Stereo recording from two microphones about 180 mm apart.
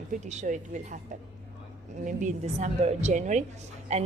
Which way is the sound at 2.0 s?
40° right (ahead or behind).